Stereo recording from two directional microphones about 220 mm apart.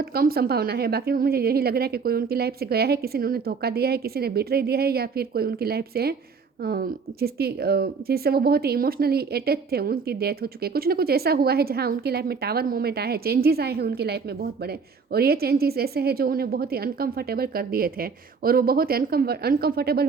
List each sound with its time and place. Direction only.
0.0 s speech: 45° right (ahead or behind)